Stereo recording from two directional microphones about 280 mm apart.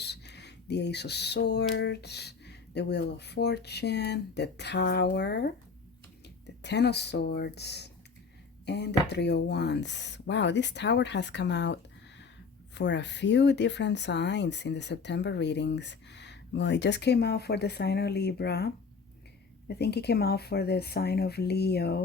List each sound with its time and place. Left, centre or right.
0.0 s speech: left